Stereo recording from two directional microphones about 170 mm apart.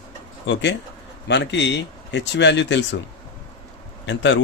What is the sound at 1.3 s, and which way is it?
Speech, 90° left.